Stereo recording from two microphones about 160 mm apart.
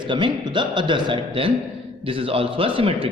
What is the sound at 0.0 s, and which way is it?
A man's voice, 30° right (ahead or behind).